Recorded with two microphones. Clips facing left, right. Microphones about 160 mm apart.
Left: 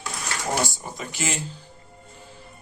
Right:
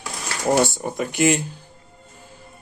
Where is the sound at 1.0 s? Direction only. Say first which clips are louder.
Right 11 dB; 60° right (ahead or behind).